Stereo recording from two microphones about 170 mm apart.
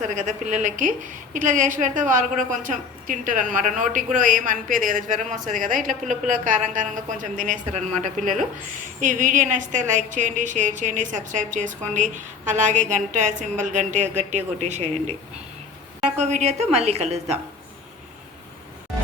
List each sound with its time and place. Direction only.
0.2 s a woman's voice: 45° right (ahead or behind)
16.1 s a woman's voice: 45° right (ahead or behind)